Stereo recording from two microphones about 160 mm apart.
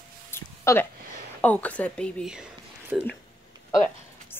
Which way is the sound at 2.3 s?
5° right (ahead or behind).